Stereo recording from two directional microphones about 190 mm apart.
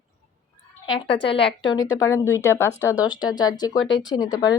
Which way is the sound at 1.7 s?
15° left (ahead or behind).